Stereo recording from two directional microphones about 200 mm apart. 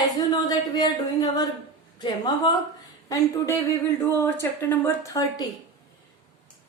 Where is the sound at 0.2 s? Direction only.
20° left (ahead or behind).